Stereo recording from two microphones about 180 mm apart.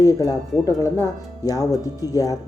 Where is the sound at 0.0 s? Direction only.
20° left (ahead or behind).